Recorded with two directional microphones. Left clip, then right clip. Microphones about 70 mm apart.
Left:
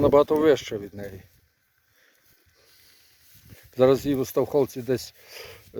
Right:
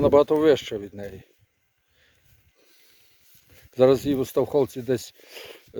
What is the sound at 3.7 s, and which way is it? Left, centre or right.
Speech, right.